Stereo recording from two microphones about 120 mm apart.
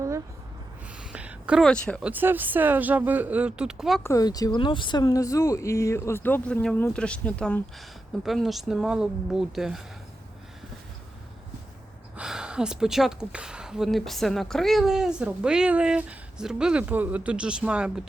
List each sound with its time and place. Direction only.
1.1 s a sound: 10° right (ahead or behind)
1.6 s speech: 10° left (ahead or behind)
2.0 s speech: 15° right (ahead or behind)
4.0 s speech: 30° left (ahead or behind); by 7.6 s 10° left (ahead or behind)
8.2 s speech: centre (ahead or behind)
12.1 s speech: 5° right (ahead or behind)